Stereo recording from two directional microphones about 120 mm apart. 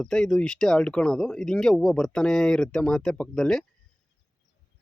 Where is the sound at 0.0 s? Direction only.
5° left (ahead or behind).